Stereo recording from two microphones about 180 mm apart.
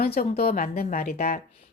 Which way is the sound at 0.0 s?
60° left (ahead or behind).